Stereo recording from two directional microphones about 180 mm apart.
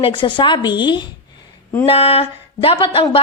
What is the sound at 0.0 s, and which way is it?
A woman's voice, 30° left (ahead or behind).